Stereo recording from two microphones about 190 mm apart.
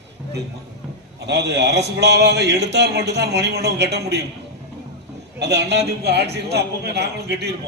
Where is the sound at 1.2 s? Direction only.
65° right (ahead or behind).